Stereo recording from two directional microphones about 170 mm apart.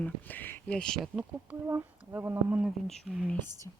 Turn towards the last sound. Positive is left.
turn(degrees=-5)  # may be behind; listen again after turning